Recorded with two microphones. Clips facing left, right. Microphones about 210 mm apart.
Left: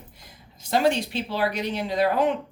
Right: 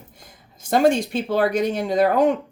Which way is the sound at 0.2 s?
50° right (ahead or behind).